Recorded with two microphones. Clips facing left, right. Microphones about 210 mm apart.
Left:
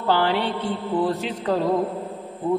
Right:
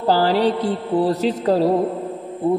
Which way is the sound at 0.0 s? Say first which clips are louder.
Right 5 dB; 40° right (ahead or behind).